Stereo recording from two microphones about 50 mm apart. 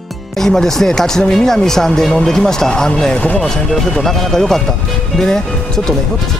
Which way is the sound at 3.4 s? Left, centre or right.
Centre.